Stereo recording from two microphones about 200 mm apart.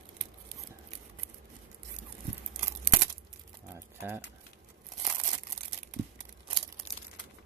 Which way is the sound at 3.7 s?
10° right (ahead or behind).